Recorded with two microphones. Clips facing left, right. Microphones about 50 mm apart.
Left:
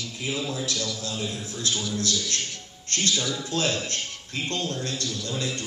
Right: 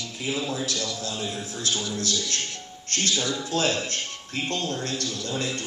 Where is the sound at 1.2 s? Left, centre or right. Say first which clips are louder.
Even; right.